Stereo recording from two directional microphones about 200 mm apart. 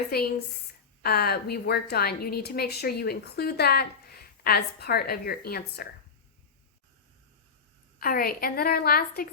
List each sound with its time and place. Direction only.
0.1 s a woman's voice: 50° left (ahead or behind)
7.9 s a woman's voice: 45° left (ahead or behind)